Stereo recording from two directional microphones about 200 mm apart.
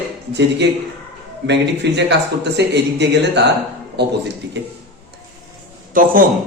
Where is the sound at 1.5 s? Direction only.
60° right (ahead or behind).